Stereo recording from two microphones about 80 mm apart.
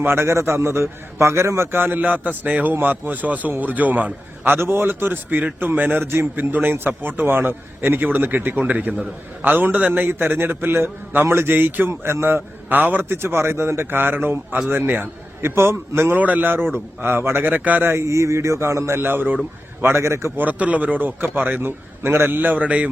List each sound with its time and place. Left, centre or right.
0.0 s a man's voice: right
16.1 s a man's voice: right
17.9 s speech: right
20.4 s a man's voice: centre